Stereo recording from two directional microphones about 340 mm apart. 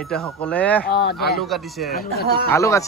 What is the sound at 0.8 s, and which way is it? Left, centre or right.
Speech, left.